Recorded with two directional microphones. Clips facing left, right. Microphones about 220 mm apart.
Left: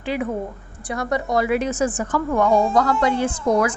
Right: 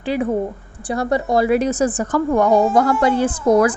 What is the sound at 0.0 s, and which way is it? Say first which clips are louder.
A woman's voice: right 5 dB; 35° right (ahead or behind).